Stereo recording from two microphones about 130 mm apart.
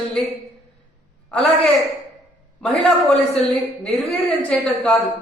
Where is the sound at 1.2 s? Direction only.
5° left (ahead or behind).